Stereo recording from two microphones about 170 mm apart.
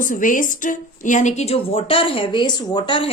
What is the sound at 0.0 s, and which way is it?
A woman's voice, 50° left (ahead or behind).